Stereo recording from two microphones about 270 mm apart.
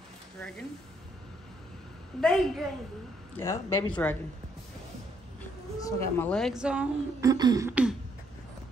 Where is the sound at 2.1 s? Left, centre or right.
Centre.